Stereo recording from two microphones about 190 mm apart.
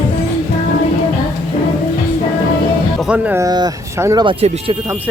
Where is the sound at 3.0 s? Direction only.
5° right (ahead or behind); by 4.8 s 30° right (ahead or behind).